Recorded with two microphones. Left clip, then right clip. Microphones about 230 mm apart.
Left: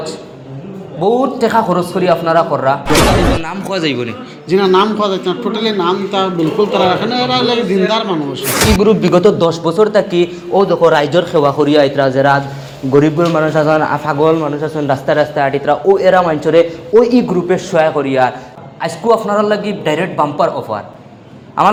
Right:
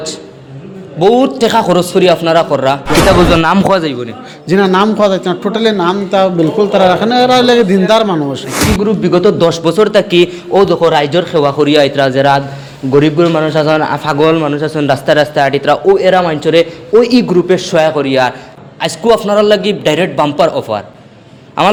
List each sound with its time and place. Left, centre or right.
0.9 s a man's voice: right
2.8 s speech: centre
3.3 s a man's voice: right
8.8 s speech: centre
9.4 s a man's voice: right
15.9 s a man's voice: right